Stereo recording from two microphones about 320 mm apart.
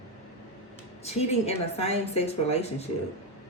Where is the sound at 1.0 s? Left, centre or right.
Centre.